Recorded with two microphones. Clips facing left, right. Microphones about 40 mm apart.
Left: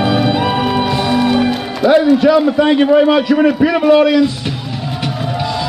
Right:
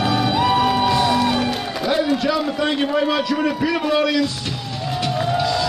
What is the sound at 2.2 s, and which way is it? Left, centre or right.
A man's voice, left.